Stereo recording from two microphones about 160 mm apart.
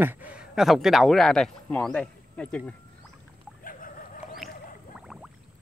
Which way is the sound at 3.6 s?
60° left (ahead or behind).